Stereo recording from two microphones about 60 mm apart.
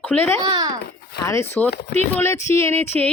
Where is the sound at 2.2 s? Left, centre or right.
Left.